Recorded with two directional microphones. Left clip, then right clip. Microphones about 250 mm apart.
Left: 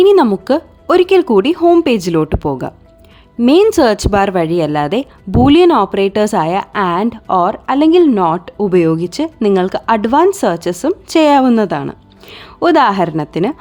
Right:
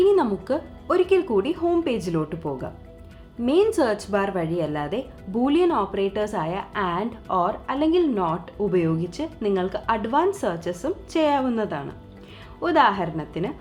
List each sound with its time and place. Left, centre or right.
0.0 s speech: left